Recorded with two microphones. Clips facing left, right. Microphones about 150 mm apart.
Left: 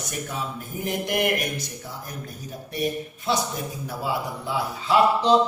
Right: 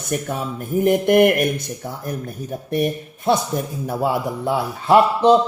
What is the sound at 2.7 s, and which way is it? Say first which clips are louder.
Speech: right 6 dB; 55° right (ahead or behind).